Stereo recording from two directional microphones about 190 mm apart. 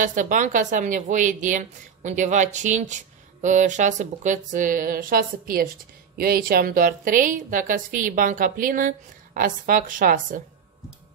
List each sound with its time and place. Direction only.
0.0 s a woman's voice: 40° right (ahead or behind)